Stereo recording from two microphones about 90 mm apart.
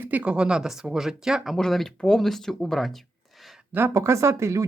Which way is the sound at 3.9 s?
35° right (ahead or behind).